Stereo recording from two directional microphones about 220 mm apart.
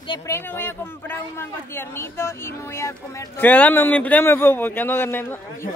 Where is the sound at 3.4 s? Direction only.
10° left (ahead or behind).